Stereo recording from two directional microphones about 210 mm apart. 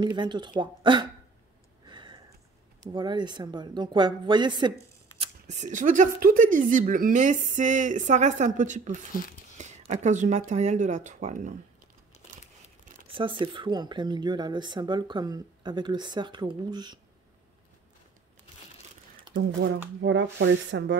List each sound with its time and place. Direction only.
0.0 s speech: 20° right (ahead or behind)
1.9 s a sound: 20° right (ahead or behind)
2.8 s speech: 20° right (ahead or behind)
5.2 s speech: 35° right (ahead or behind)
13.1 s speech: 25° right (ahead or behind)
19.3 s a sound: 20° right (ahead or behind)
20.0 s speech: 60° right (ahead or behind)